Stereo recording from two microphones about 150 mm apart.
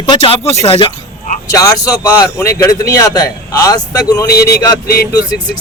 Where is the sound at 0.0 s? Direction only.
35° left (ahead or behind).